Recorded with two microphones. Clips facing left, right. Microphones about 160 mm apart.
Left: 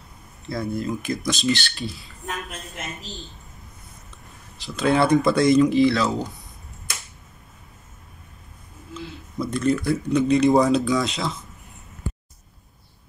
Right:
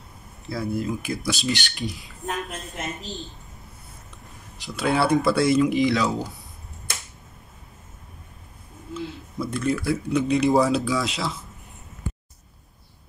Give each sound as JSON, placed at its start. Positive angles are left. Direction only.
{"t": 0.5, "sound": "speech", "side_deg": -5}
{"t": 4.6, "sound": "speech", "side_deg": -15}
{"t": 4.8, "sound": "speech", "side_deg": -5}
{"t": 8.9, "sound": "speech", "side_deg": -5}